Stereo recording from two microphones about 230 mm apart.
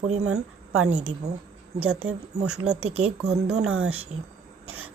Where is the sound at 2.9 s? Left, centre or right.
Right.